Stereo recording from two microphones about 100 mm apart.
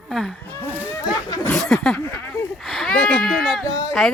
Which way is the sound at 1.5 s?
5° left (ahead or behind).